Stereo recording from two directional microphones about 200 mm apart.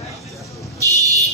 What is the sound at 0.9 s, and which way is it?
Vehicle, 15° right (ahead or behind).